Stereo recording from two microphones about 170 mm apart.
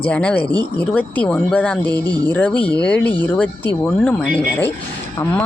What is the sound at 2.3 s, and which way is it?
Speech, 10° left (ahead or behind).